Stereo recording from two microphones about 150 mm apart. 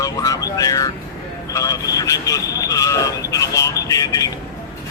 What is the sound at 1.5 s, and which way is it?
Speech, 20° left (ahead or behind).